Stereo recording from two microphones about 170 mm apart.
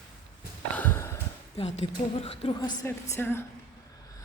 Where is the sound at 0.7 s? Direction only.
10° left (ahead or behind).